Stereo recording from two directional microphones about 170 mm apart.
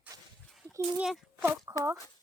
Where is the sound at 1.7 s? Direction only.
20° right (ahead or behind).